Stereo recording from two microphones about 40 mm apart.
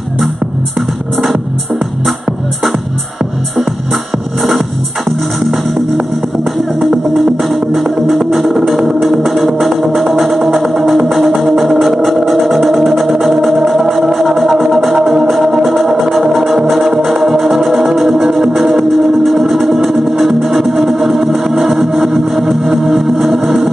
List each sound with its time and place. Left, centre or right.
0.7 s music: centre
4.4 s music: centre
6.8 s music: centre
14.9 s music: centre